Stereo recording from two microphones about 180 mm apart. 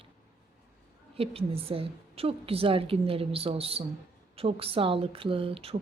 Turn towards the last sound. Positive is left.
turn(degrees=-30)  # may be behind; listen again after turning